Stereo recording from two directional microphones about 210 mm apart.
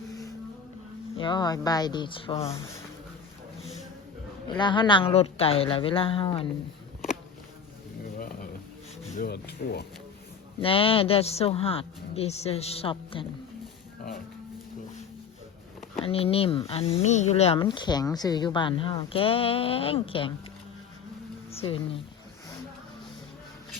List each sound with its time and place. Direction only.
1.1 s speech: 20° left (ahead or behind)
4.4 s speech: 20° left (ahead or behind)
9.1 s speech: 50° left (ahead or behind)
10.6 s speech: 25° left (ahead or behind)
16.0 s speech: 25° left (ahead or behind)
21.5 s speech: 25° left (ahead or behind)